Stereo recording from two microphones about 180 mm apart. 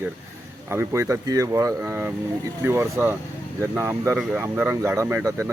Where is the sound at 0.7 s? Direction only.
15° right (ahead or behind).